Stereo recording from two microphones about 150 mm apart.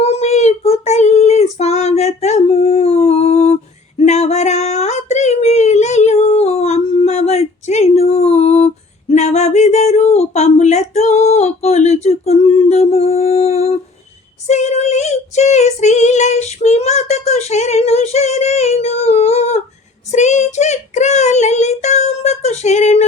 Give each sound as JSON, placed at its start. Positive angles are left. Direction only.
{"t": 0.0, "sound": "child singing", "side_deg": 45}
{"t": 14.4, "sound": "female singing", "side_deg": 50}
{"t": 20.1, "sound": "child singing", "side_deg": 50}